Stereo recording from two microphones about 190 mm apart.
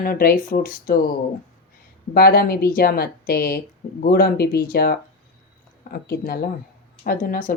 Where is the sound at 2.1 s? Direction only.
55° left (ahead or behind).